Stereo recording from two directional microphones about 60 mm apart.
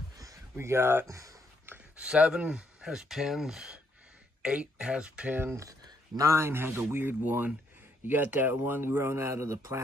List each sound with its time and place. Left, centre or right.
0.6 s speech: right
1.0 s speech: right
2.0 s speech: centre
5.5 s speech: right
6.4 s speech: right